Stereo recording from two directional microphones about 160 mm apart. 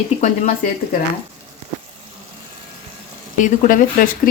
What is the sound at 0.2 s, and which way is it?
Speech, 55° left (ahead or behind).